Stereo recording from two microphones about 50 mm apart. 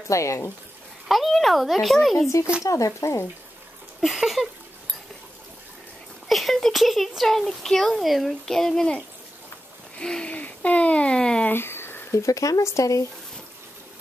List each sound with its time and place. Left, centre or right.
0.1 s speech: left
1.0 s speech: centre
2.2 s speech: left
2.6 s speech: left
4.0 s a sound: centre
6.2 s speech: centre
8.5 s a child's voice: centre
9.9 s a sound: centre
10.3 s speech: left
11.5 s a sound: left
12.1 s speech: left